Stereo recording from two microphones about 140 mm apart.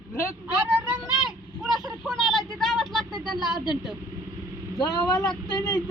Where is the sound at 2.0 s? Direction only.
Centre (ahead or behind).